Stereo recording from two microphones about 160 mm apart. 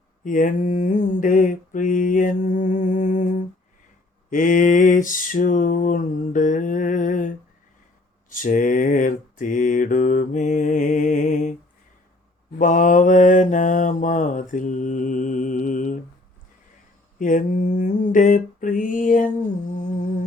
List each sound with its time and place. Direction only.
0.3 s mantra: 55° left (ahead or behind)
4.3 s a sound: 55° left (ahead or behind)
8.3 s mantra: 55° left (ahead or behind)
12.5 s mantra: 55° left (ahead or behind)
17.2 s mantra: 55° left (ahead or behind)
19.7 s humming: 50° left (ahead or behind)